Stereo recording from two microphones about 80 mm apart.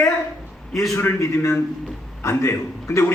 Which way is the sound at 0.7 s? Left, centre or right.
Centre.